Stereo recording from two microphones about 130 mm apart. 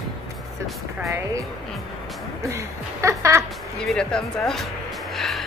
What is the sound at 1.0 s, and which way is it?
Speech, 25° right (ahead or behind).